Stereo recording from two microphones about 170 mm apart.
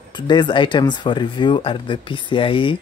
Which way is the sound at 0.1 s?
25° left (ahead or behind).